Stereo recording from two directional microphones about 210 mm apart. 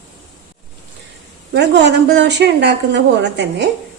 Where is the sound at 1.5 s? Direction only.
55° right (ahead or behind).